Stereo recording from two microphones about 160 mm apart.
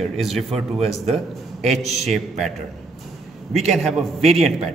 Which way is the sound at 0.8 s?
40° right (ahead or behind).